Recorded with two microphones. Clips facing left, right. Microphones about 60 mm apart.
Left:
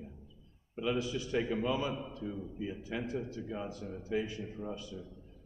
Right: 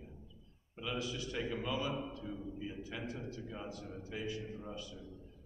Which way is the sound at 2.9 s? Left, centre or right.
Left.